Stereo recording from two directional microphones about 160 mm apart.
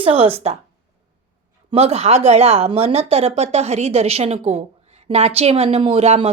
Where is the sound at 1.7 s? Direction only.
40° right (ahead or behind).